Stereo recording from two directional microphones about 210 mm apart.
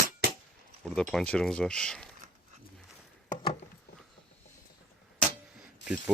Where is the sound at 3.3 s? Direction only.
25° left (ahead or behind).